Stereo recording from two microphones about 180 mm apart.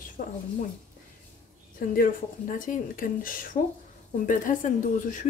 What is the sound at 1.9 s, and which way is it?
Speech, 50° left (ahead or behind).